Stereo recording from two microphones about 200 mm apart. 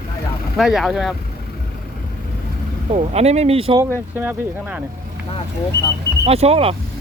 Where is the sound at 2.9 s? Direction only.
35° right (ahead or behind).